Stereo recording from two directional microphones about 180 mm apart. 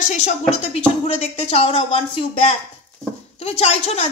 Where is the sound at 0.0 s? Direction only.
40° left (ahead or behind).